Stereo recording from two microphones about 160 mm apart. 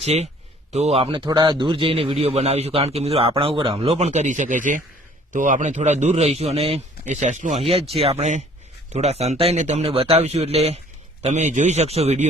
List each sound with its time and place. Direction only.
0.0 s a man's voice: 40° right (ahead or behind)